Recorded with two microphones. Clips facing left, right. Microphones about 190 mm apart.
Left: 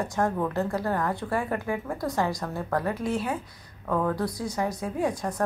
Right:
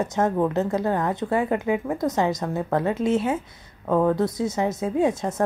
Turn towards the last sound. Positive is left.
turn(degrees=-25)  # may be behind; listen again after turning